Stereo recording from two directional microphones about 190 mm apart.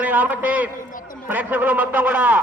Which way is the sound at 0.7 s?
45° left (ahead or behind).